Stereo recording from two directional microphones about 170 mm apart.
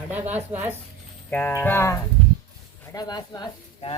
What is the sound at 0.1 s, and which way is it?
Speech, 10° right (ahead or behind).